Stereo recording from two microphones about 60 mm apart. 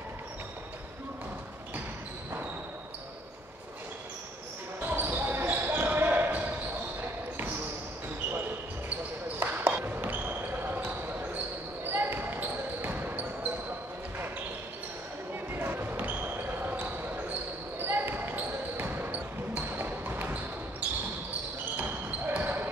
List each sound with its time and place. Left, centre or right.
4.8 s basketball bounce: right
9.4 s basketball bounce: right
15.5 s basketball bounce: right
21.7 s basketball bounce: right